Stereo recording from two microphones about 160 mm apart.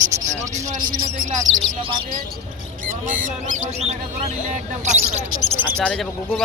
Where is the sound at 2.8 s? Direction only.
55° right (ahead or behind).